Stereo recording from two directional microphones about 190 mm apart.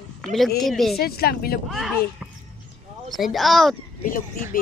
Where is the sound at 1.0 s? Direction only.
55° left (ahead or behind).